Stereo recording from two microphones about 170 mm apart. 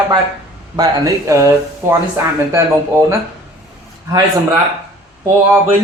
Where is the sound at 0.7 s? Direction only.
20° right (ahead or behind).